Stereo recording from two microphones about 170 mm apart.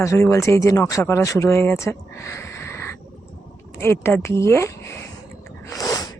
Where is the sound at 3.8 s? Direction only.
15° left (ahead or behind).